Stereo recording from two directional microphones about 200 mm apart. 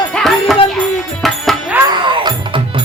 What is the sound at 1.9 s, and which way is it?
Music, 25° right (ahead or behind).